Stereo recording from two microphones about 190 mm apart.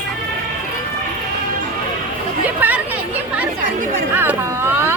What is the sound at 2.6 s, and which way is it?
Chatter, 10° right (ahead or behind).